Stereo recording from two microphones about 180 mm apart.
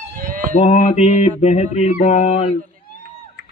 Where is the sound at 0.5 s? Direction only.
40° left (ahead or behind).